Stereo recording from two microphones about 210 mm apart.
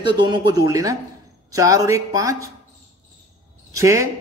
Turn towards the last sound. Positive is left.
turn(degrees=-15)  # may be behind; listen again after turning